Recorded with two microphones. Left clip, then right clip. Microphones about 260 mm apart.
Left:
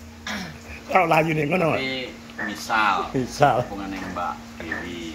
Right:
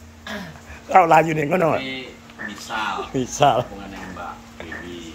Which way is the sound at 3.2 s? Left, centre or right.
Centre.